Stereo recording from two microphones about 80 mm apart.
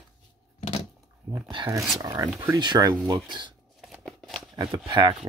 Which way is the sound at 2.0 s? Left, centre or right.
Right.